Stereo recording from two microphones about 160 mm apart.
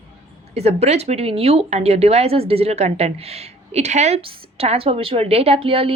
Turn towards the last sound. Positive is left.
turn(degrees=-35)  # may be behind; listen again after turning